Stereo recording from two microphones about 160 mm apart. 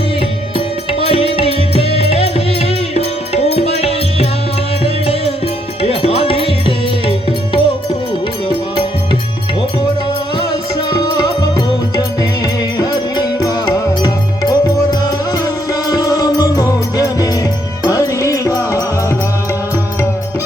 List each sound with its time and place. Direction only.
1.0 s music: 35° left (ahead or behind)
10.8 s music: 30° left (ahead or behind)
12.7 s music: 25° left (ahead or behind)